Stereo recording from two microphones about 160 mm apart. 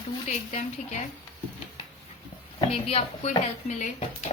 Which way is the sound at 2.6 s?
40° left (ahead or behind).